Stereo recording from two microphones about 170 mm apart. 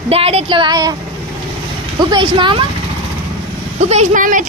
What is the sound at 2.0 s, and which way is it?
Speech, 25° right (ahead or behind).